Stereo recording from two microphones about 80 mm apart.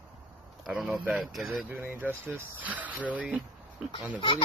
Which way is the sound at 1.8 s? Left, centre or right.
Right.